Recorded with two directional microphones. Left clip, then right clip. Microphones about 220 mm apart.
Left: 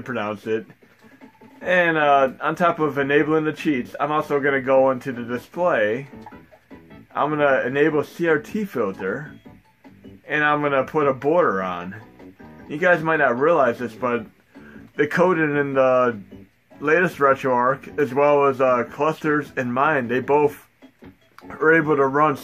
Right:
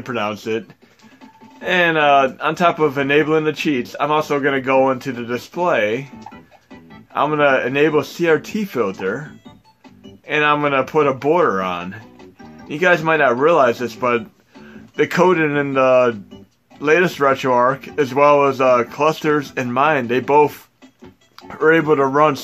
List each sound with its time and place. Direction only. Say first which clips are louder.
0.0 s speech: right 4 dB; 25° right (ahead or behind)
7.2 s speech: right 4 dB; 25° right (ahead or behind)
10.2 s speech: right 4 dB; 25° right (ahead or behind)